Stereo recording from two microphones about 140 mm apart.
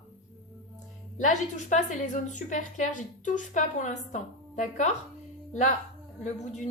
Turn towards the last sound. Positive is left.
turn(degrees=60)  # may be behind; listen again after turning